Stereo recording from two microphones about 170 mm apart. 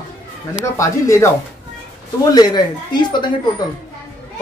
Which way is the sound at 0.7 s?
15° left (ahead or behind).